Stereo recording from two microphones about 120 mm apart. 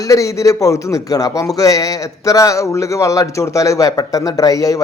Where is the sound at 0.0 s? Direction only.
25° left (ahead or behind).